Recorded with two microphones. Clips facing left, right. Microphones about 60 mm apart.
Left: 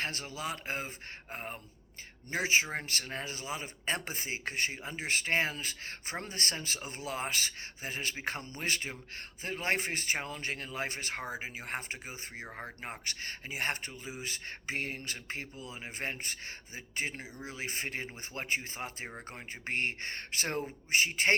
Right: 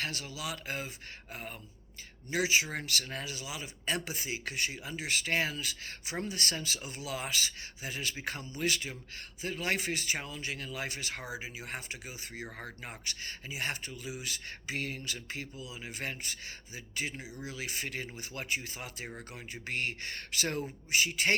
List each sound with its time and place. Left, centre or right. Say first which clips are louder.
0.0 s speech: left 1 dB; left
12.3 s speech: right 1 dB; left
12.8 s speech: left 2 dB; left
19.3 s speech: left 3 dB; left